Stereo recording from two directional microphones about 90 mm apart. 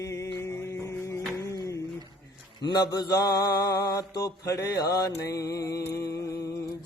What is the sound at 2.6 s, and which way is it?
Mantra, 50° left (ahead or behind).